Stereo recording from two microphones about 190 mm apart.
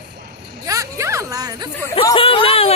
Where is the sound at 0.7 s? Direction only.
15° right (ahead or behind).